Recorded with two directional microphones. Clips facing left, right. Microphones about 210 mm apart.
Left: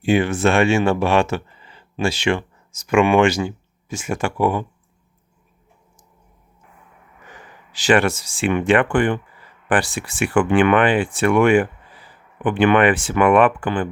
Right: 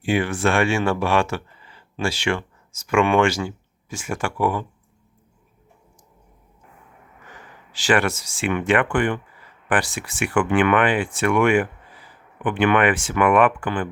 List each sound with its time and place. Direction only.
0.0 s speech: 25° left (ahead or behind)
7.7 s speech: 20° left (ahead or behind)